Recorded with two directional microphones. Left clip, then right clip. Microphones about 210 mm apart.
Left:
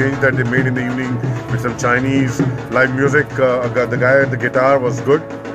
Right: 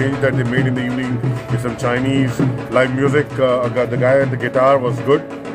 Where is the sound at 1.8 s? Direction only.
10° left (ahead or behind).